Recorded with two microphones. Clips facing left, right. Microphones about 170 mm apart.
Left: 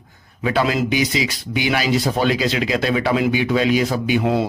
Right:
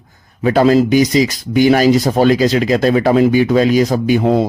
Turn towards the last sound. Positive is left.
turn(degrees=-40)  # may be behind; listen again after turning